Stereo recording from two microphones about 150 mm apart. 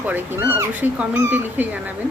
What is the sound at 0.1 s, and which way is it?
A woman's voice, 10° right (ahead or behind).